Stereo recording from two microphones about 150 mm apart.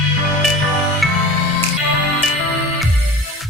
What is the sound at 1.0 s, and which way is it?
Music, centre (ahead or behind).